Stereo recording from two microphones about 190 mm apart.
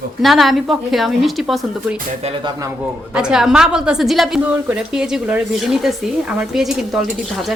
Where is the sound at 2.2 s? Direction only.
30° right (ahead or behind).